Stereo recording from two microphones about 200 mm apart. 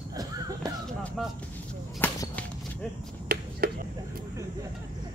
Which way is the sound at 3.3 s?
45° right (ahead or behind).